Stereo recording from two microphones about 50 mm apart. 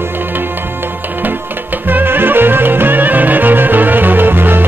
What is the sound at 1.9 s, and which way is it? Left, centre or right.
Music, right.